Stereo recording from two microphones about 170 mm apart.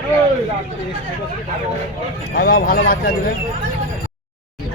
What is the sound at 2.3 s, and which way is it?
Speech, 60° left (ahead or behind).